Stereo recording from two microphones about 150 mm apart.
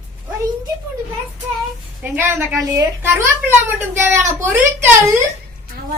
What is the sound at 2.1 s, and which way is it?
A child's voice, 15° right (ahead or behind).